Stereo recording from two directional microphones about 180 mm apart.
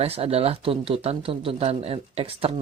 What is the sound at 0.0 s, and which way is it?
Speech, 35° right (ahead or behind).